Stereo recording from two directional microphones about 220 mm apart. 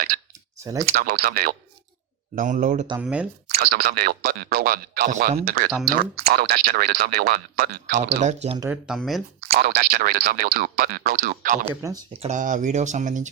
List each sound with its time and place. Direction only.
0.3 s clicking: 15° right (ahead or behind)
0.9 s speech: 45° right (ahead or behind)
3.0 s speech: 5° right (ahead or behind)
3.6 s speech: 45° right (ahead or behind)
8.2 s speech: 30° right (ahead or behind)
8.7 s speech: centre (ahead or behind)
9.5 s speech: 40° right (ahead or behind)
11.8 s speech: 20° right (ahead or behind)